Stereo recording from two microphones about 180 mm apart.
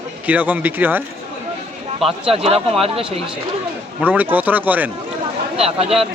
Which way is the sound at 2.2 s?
35° right (ahead or behind).